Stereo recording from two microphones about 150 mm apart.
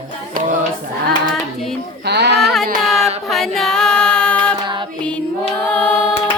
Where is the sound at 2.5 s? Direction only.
Centre (ahead or behind).